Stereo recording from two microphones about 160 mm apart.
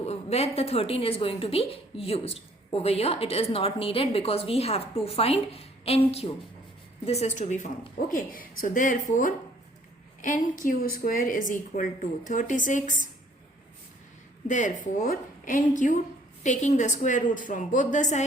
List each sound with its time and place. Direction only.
0.0 s a woman's voice: 40° left (ahead or behind)
8.1 s a woman's voice: 60° left (ahead or behind)
14.4 s a woman's voice: 50° left (ahead or behind)